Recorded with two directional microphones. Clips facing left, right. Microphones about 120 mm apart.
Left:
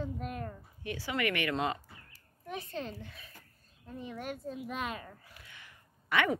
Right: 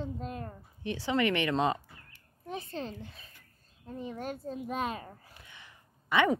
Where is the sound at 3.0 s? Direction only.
30° right (ahead or behind).